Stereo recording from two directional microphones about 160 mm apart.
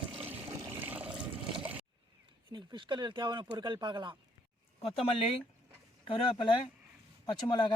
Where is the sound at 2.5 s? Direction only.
30° right (ahead or behind).